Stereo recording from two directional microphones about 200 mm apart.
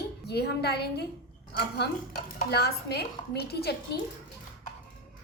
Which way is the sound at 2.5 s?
55° left (ahead or behind).